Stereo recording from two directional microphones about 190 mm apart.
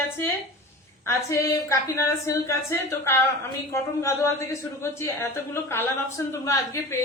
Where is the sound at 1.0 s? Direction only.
15° left (ahead or behind).